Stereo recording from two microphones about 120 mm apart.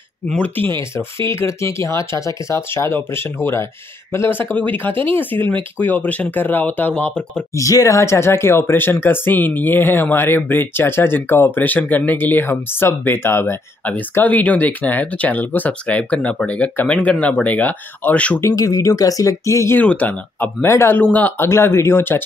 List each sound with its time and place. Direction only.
0.3 s speech: 15° left (ahead or behind)
7.5 s speech: 25° left (ahead or behind); by 18.4 s 10° left (ahead or behind)
18.5 s speech: 30° left (ahead or behind)
19.8 s speech: 10° left (ahead or behind)